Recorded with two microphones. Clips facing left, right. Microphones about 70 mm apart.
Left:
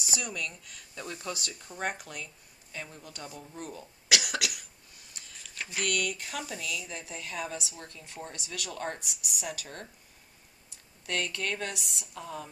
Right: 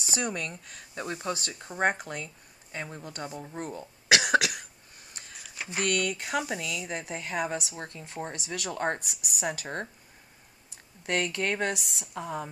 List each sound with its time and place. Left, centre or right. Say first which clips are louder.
0.0 s speech: right 4 dB; right
4.1 s cough: right 8 dB; right
5.4 s a sound: even; centre
5.7 s speech: right 3 dB; right
11.1 s speech: right 4 dB; right